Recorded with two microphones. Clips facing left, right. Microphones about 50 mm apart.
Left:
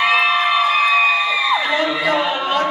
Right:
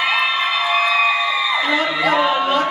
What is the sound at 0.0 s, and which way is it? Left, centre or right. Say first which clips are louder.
Crowd: left 3 dB; centre.